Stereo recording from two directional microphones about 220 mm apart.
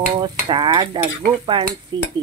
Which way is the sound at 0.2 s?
20° right (ahead or behind).